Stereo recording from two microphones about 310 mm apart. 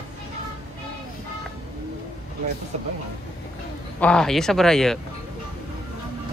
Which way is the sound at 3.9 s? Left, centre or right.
Centre.